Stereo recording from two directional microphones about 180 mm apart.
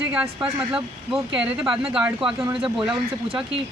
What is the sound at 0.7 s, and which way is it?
Speech, 5° right (ahead or behind).